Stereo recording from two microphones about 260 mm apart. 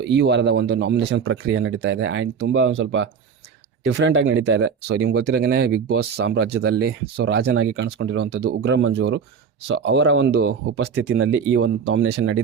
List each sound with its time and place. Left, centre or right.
0.0 s a man's voice: right